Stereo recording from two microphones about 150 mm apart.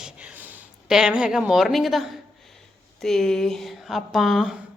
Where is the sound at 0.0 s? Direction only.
10° right (ahead or behind).